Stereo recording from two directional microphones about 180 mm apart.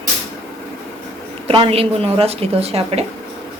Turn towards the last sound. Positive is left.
turn(degrees=-35)  # may be behind; listen again after turning